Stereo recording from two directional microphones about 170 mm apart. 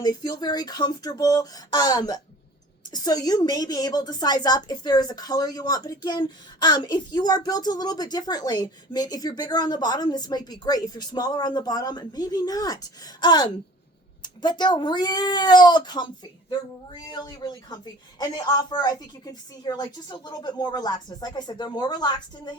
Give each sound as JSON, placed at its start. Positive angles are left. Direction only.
{"t": 0.0, "sound": "a woman's voice", "side_deg": 25}